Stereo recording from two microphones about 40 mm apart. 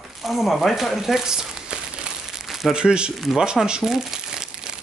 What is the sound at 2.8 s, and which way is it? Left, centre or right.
Speech, right.